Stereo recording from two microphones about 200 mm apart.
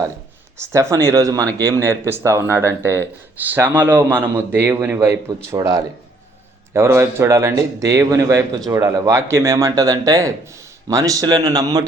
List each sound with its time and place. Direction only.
0.6 s speech: 15° right (ahead or behind)